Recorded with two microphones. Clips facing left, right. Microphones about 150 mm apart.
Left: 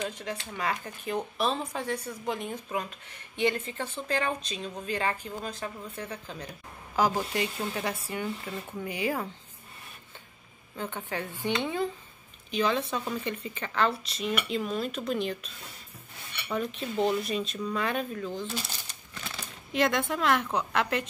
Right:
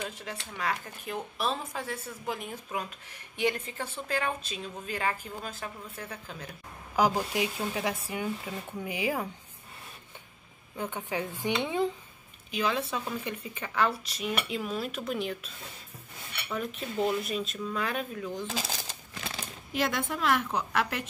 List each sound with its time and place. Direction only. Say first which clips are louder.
0.0 s speech: left 4 dB; centre (ahead or behind)
10.8 s speech: right 1 dB; 10° right (ahead or behind)
16.8 s speech: left 1 dB; 5° right (ahead or behind)
18.5 s speech: right 2 dB; 90° right
19.7 s speech: left 4 dB; 5° right (ahead or behind)